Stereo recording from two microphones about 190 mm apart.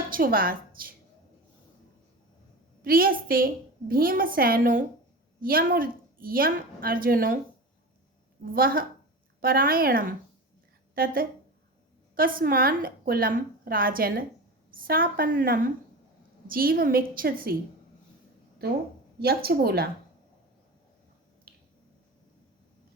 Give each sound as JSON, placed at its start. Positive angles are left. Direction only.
{"t": 0.1, "sound": "a woman's voice", "side_deg": -50}
{"t": 2.8, "sound": "a woman's voice", "side_deg": -50}
{"t": 8.5, "sound": "a woman's voice", "side_deg": -50}
{"t": 19.2, "sound": "a woman's voice", "side_deg": -55}